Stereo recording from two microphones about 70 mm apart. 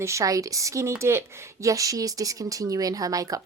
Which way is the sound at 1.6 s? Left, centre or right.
Right.